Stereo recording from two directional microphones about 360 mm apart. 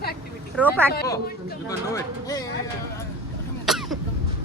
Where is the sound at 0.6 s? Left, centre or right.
Centre.